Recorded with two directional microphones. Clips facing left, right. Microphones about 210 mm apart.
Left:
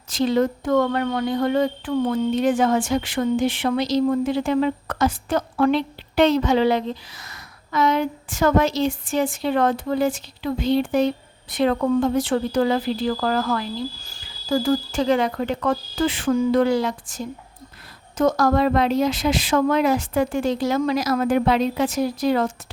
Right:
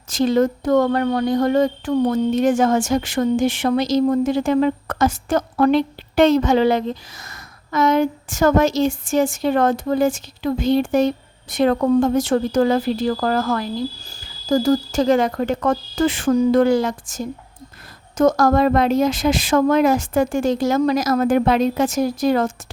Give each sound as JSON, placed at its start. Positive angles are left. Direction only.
{"t": 0.1, "sound": "speech", "side_deg": -45}